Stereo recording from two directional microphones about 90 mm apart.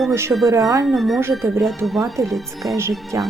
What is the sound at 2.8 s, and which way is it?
Speech, 30° right (ahead or behind).